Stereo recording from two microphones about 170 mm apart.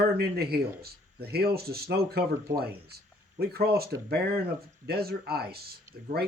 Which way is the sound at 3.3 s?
65° right (ahead or behind).